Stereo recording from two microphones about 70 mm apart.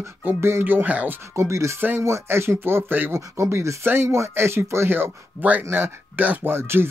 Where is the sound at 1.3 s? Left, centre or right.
Right.